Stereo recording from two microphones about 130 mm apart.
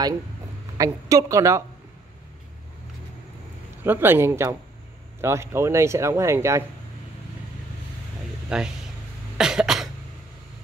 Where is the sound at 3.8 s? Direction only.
15° right (ahead or behind).